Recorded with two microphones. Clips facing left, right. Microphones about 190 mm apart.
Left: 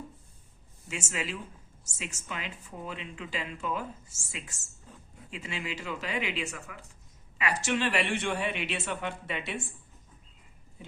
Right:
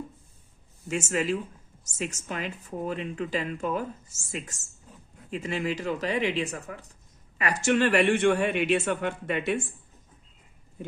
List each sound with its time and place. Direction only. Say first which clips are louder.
0.9 s speech: right 9 dB; 45° right (ahead or behind)
4.9 s a sound: even; centre (ahead or behind)
5.3 s speech: right 8 dB; 45° right (ahead or behind)